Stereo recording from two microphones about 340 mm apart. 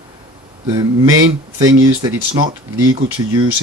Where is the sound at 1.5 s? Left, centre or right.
Centre.